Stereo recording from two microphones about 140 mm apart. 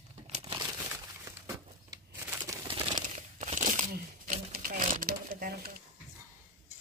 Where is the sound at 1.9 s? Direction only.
20° right (ahead or behind).